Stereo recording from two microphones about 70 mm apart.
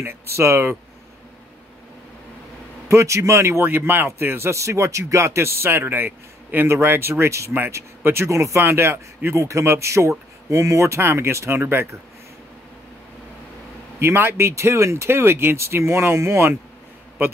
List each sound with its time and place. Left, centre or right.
0.0 s speech: right
2.9 s a man's voice: right
13.9 s speech: right